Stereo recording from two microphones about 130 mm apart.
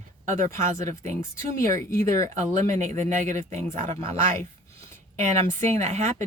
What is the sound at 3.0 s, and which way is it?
Speech, 70° right (ahead or behind).